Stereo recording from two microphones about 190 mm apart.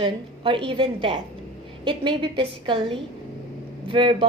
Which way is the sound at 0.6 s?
25° right (ahead or behind).